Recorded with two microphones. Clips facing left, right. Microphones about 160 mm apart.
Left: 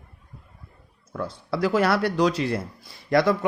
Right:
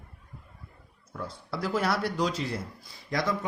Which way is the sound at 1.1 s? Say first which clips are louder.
Left 7 dB; 80° left.